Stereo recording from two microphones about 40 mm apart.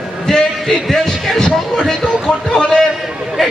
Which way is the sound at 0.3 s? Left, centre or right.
Centre.